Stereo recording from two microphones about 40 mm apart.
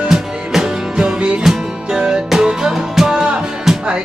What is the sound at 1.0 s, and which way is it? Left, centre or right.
Music, right.